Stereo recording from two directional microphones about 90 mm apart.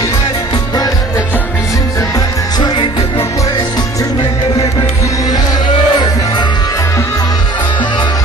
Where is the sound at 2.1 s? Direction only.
55° left (ahead or behind).